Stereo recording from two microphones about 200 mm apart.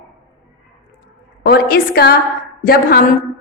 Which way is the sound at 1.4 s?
50° left (ahead or behind).